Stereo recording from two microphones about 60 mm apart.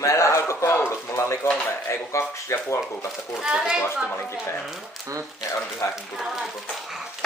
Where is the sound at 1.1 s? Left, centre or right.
Left.